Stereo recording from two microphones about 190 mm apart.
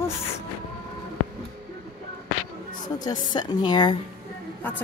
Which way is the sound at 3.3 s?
25° left (ahead or behind).